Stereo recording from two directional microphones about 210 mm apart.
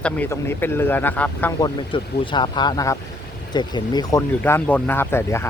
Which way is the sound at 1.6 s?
25° left (ahead or behind).